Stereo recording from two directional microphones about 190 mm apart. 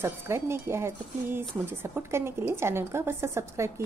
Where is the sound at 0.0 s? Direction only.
15° right (ahead or behind).